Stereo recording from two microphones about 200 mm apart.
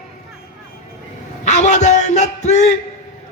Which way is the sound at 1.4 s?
35° left (ahead or behind).